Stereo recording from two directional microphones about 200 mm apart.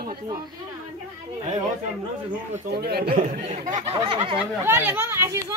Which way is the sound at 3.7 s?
30° right (ahead or behind).